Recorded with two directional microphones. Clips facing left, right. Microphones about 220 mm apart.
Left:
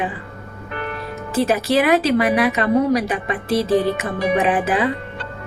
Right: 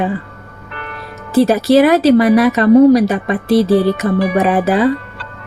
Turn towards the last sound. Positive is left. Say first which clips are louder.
# right 6 dB
turn(degrees=-35)  # may be behind; listen again after turning